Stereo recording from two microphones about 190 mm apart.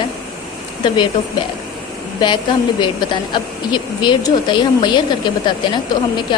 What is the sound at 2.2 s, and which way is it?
Speech, 25° left (ahead or behind).